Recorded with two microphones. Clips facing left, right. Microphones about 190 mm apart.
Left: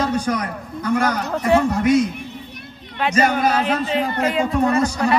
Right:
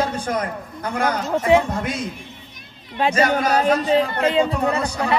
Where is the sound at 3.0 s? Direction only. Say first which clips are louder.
Even; 40° right (ahead or behind).